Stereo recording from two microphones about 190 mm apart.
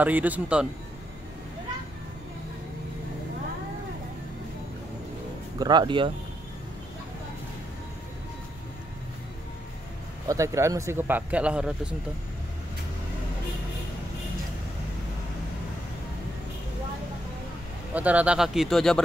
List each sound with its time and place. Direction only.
0.0 s speech: 10° right (ahead or behind)
5.6 s speech: 25° right (ahead or behind)
10.2 s speech: 15° right (ahead or behind)
17.9 s speech: 5° right (ahead or behind)